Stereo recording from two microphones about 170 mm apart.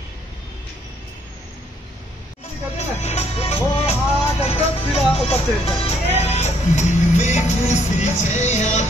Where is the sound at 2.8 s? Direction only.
40° left (ahead or behind).